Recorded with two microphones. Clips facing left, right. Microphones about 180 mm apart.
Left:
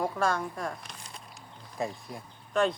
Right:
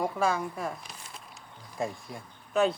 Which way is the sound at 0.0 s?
5° right (ahead or behind).